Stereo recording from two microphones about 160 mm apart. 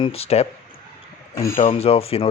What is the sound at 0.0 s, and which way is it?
Speech, 40° left (ahead or behind).